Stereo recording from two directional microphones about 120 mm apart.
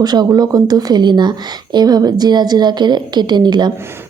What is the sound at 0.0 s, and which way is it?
Speech, 35° right (ahead or behind).